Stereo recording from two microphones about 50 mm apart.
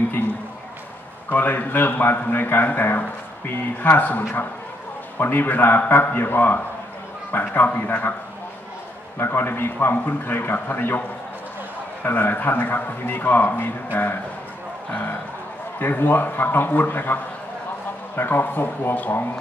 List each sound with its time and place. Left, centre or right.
1.3 s a man's voice: left
4.2 s a man's voice: left
9.2 s a man's voice: left
12.0 s a man's voice: left
15.8 s a man's voice: left